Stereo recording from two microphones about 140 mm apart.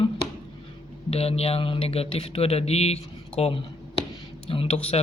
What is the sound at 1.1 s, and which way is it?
Speech, 45° left (ahead or behind).